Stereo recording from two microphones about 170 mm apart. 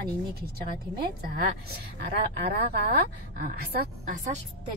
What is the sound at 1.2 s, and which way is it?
Speech, 60° right (ahead or behind).